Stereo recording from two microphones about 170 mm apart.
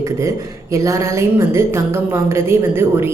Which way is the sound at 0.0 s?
15° right (ahead or behind).